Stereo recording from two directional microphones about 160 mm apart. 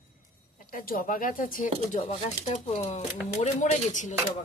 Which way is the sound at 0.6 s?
60° left (ahead or behind).